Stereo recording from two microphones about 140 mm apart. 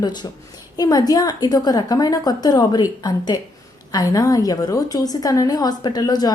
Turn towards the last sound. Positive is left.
turn(degrees=30)  # may be behind; listen again after turning